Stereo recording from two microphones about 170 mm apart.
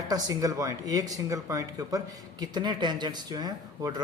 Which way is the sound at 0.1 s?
20° right (ahead or behind).